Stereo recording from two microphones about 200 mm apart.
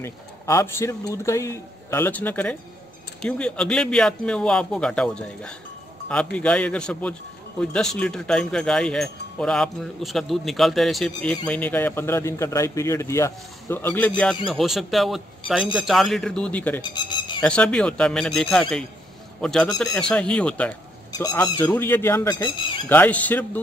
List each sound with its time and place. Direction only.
0.0 s a man's voice: 15° left (ahead or behind)
16.9 s a sound: 20° left (ahead or behind)
17.4 s speech: 5° left (ahead or behind)
21.1 s a man's voice: 15° left (ahead or behind)